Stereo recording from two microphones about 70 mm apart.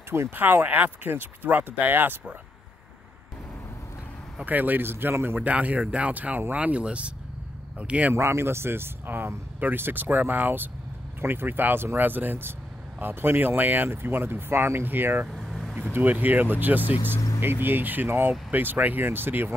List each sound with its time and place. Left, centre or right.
0.1 s speech: right
4.5 s speech: right
8.1 s speech: right
15.2 s vehicle: centre
15.7 s speech: right